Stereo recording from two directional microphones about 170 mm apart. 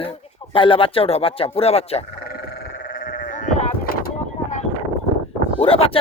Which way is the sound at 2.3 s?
70° left (ahead or behind).